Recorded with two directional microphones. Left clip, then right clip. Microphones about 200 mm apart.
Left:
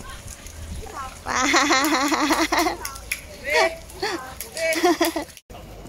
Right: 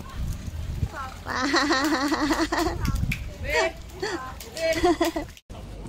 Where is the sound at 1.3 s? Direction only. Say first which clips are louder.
Left 5 dB; 10° left (ahead or behind).